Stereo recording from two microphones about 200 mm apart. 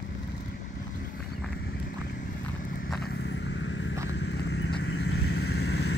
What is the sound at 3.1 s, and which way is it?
Vehicle, 65° left (ahead or behind).